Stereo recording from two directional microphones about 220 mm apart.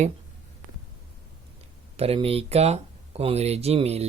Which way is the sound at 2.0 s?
25° right (ahead or behind).